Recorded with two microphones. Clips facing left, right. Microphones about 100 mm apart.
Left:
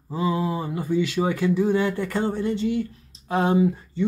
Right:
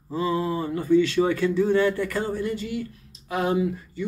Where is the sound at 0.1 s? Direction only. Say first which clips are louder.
Even; 20° left (ahead or behind).